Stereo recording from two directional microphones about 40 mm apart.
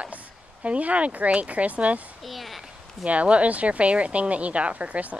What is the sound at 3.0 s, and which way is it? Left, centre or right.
Speech, right.